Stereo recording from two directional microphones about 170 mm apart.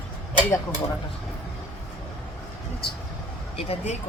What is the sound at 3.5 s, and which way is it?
Speech, 35° left (ahead or behind).